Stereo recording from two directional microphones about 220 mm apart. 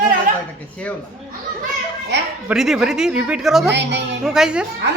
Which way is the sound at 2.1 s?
50° right (ahead or behind).